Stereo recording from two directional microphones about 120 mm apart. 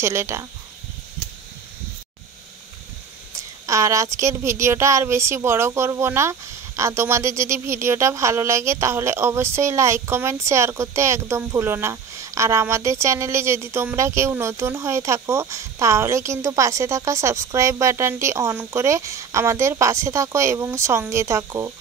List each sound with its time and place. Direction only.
0.0 s speech: 20° right (ahead or behind)
3.3 s speech: 25° right (ahead or behind)